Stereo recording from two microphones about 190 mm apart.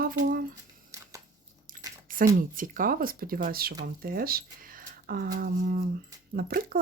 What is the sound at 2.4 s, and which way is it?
Speech, 45° right (ahead or behind).